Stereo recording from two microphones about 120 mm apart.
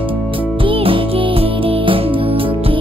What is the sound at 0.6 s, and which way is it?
Music, 50° right (ahead or behind).